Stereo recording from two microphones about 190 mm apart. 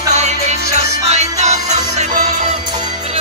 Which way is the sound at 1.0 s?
35° right (ahead or behind).